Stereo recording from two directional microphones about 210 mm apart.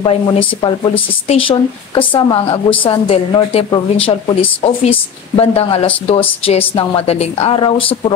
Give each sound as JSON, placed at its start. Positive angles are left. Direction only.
{"t": 0.0, "sound": "speech", "side_deg": 25}